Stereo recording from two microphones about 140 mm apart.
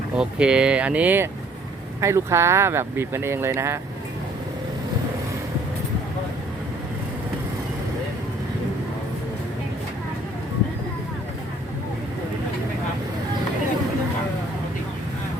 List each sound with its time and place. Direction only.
0.2 s speech: 5° right (ahead or behind)